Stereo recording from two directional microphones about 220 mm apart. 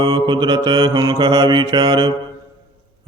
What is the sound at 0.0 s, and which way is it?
Mantra, 20° right (ahead or behind).